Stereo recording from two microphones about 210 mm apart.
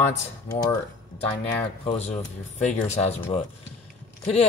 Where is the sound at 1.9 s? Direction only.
30° left (ahead or behind).